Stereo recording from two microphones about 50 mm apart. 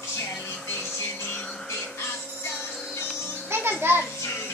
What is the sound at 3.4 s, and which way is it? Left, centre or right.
Music, right.